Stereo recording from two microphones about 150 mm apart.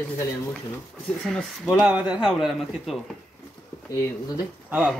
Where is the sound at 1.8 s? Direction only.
10° right (ahead or behind).